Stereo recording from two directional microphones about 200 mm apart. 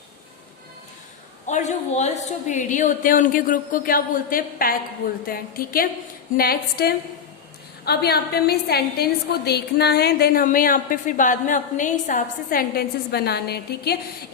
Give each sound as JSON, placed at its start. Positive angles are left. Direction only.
{"t": 1.5, "sound": "a woman's voice", "side_deg": 35}